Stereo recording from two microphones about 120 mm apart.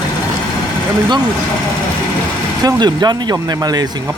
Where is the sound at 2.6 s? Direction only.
35° right (ahead or behind).